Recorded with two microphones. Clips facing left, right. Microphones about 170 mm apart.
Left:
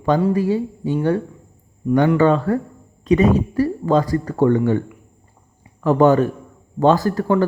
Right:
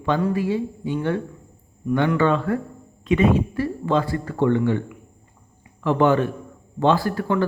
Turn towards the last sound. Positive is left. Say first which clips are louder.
# left 4 dB
turn(degrees=40)  # may be behind; listen again after turning